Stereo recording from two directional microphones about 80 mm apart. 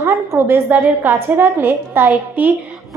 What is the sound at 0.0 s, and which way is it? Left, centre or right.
A woman's voice, right.